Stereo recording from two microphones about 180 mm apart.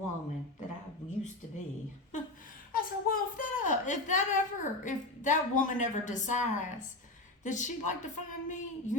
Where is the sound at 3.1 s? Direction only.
45° left (ahead or behind).